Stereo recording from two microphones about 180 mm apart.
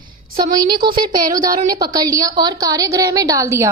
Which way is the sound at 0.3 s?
50° right (ahead or behind).